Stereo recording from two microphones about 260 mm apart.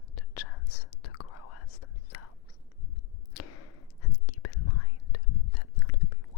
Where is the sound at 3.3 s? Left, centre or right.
Left.